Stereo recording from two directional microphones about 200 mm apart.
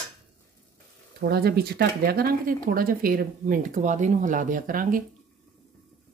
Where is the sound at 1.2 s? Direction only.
50° right (ahead or behind).